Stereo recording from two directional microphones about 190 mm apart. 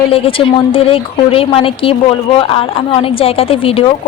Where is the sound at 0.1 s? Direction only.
30° left (ahead or behind).